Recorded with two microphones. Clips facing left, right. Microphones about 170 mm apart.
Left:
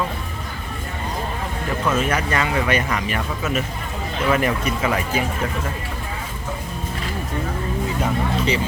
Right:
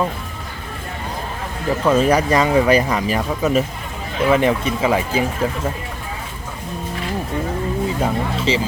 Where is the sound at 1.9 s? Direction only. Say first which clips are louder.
Right 7 dB; 35° right (ahead or behind).